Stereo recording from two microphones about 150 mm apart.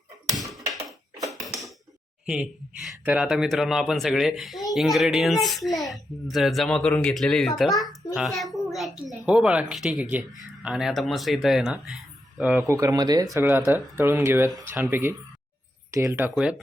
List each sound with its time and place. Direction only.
0.3 s a sound: centre (ahead or behind)
2.2 s a woman's voice: 5° right (ahead or behind)
12.6 s speech: 20° right (ahead or behind)
13.3 s speech: 15° right (ahead or behind)
16.3 s a woman's voice: 5° right (ahead or behind)